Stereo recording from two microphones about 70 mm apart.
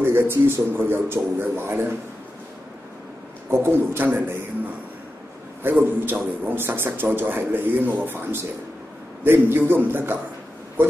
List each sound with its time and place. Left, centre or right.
0.0 s speech: right
3.4 s speech: right
5.6 s a man's voice: right